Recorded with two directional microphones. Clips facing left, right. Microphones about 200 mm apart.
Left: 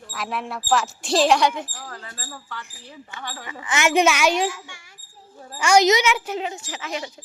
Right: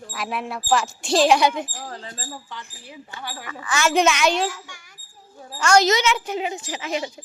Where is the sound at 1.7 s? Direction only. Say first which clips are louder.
Right 3 dB; 20° right (ahead or behind).